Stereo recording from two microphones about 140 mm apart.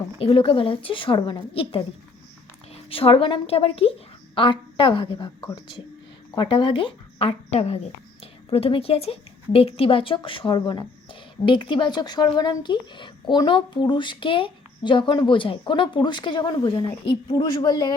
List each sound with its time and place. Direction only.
0.2 s a woman's voice: 40° left (ahead or behind)